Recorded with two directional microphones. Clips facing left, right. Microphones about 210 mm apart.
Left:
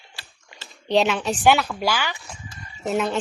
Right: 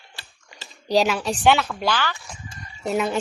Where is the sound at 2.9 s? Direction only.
Centre (ahead or behind).